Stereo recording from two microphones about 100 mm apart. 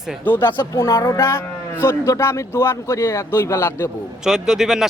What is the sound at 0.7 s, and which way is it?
A man's voice, 35° left (ahead or behind).